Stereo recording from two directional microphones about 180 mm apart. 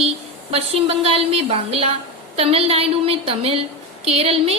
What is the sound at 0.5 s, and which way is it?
A woman's voice, 35° right (ahead or behind).